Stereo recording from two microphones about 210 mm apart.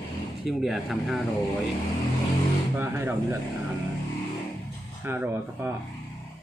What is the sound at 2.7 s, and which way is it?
Speech, 10° right (ahead or behind).